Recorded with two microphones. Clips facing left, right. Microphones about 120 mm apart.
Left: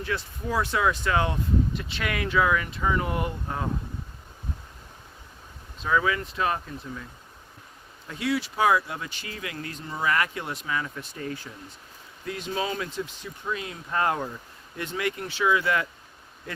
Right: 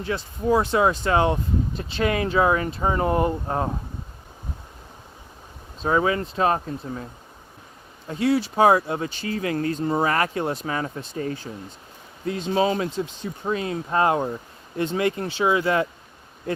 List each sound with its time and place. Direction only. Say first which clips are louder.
0.0 s speech: right 5 dB; 25° right (ahead or behind)
5.8 s speech: right 4 dB; 35° right (ahead or behind)